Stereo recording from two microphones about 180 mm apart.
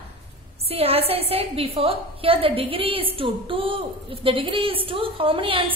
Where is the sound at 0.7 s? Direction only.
35° right (ahead or behind).